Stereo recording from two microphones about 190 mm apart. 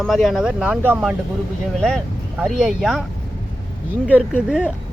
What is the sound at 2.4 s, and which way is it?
Speech, centre (ahead or behind).